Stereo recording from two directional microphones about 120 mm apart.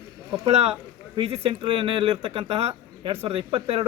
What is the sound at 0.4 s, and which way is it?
Speech, 60° right (ahead or behind).